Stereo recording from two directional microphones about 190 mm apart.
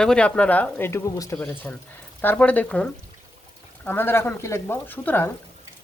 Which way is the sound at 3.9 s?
10° left (ahead or behind).